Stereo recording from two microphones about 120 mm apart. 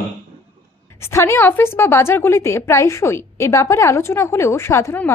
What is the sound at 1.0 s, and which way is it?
A woman's voice, 20° left (ahead or behind).